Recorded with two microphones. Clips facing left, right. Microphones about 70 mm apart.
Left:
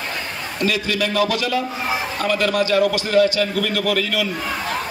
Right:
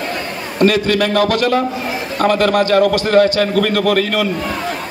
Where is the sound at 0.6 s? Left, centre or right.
Right.